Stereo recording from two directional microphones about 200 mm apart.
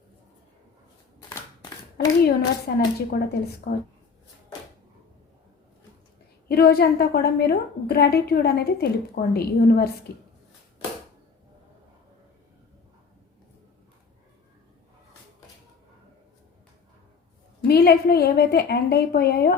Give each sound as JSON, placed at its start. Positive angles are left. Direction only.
{"t": 2.2, "sound": "a woman's voice", "side_deg": 50}
{"t": 6.5, "sound": "a woman's voice", "side_deg": 50}
{"t": 17.7, "sound": "a woman's voice", "side_deg": 50}